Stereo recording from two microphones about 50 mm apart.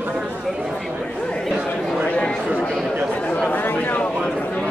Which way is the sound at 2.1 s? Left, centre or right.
Left.